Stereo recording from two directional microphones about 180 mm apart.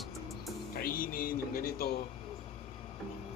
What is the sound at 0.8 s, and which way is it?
Speech, 55° left (ahead or behind).